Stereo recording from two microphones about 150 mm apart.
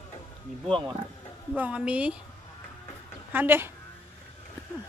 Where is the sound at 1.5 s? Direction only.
10° right (ahead or behind).